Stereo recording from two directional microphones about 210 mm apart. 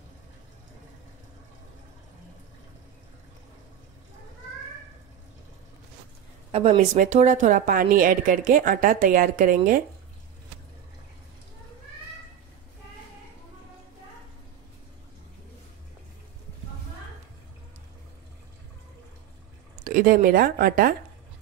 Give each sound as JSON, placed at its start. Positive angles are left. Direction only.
{"t": 6.5, "sound": "a woman's voice", "side_deg": -30}
{"t": 19.8, "sound": "a woman's voice", "side_deg": -40}